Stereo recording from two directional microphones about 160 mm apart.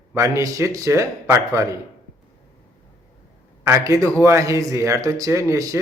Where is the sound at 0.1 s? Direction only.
20° right (ahead or behind).